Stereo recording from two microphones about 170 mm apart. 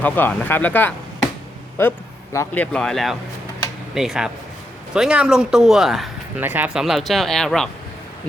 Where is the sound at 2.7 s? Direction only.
5° left (ahead or behind).